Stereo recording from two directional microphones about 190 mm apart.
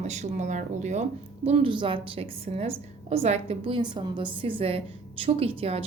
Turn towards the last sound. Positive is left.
turn(degrees=-30)  # may be behind; listen again after turning